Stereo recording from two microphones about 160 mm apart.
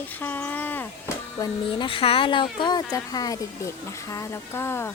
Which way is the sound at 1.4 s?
30° left (ahead or behind).